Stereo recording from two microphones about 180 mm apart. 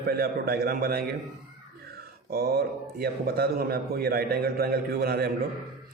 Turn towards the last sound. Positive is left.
turn(degrees=-60)  # may be behind; listen again after turning